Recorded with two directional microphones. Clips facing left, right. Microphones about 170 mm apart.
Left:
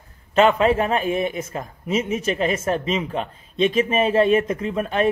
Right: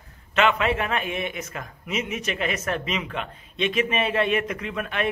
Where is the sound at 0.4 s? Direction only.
35° left (ahead or behind).